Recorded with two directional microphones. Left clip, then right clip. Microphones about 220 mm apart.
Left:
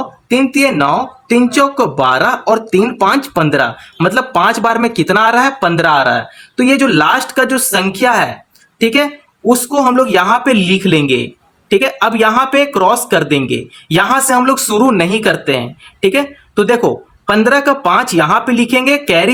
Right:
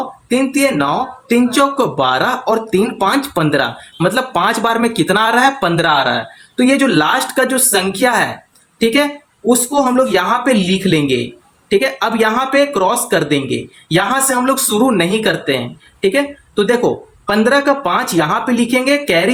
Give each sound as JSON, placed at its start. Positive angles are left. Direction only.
{"t": 0.3, "sound": "speech", "side_deg": 25}